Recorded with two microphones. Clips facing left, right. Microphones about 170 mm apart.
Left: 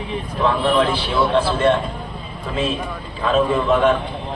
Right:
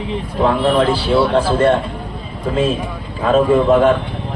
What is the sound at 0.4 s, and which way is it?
A man's voice, 40° right (ahead or behind).